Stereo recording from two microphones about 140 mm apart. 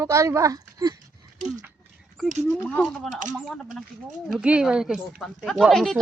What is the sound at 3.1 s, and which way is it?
Speech, 60° right (ahead or behind).